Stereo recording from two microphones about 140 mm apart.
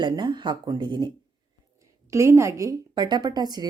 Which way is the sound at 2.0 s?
20° right (ahead or behind).